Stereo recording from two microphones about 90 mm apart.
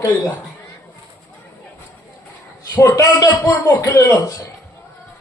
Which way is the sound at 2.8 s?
40° left (ahead or behind).